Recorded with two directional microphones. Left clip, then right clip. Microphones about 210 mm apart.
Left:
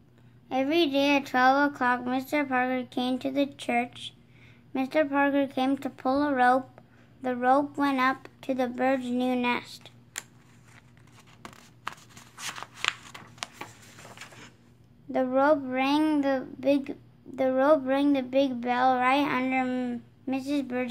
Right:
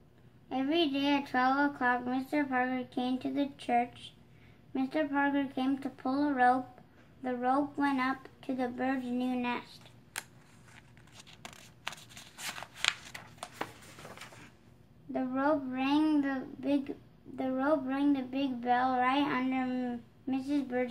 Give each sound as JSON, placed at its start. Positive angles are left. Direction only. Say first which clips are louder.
{"t": 0.5, "sound": "speech", "louder": "left 5 dB", "side_deg": 40}
{"t": 10.1, "sound": "scissors", "louder": "left 2 dB", "side_deg": 5}
{"t": 11.4, "sound": "a sound", "louder": "left 4 dB", "side_deg": -5}
{"t": 15.1, "sound": "speech", "louder": "left 8 dB", "side_deg": 40}